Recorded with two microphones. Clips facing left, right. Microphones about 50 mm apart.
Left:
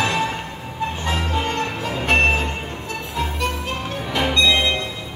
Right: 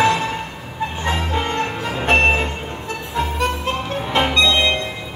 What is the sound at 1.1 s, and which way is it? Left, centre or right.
Music, right.